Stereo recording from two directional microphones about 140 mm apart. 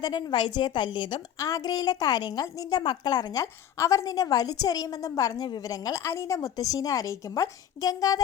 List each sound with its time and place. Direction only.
0.0 s a woman's voice: 35° left (ahead or behind)